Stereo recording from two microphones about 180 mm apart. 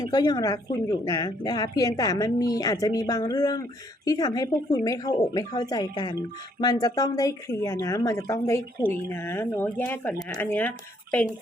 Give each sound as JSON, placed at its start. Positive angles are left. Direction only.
{"t": 0.0, "sound": "speech", "side_deg": 20}